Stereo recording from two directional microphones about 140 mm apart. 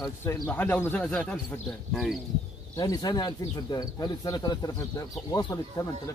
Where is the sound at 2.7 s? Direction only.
25° left (ahead or behind).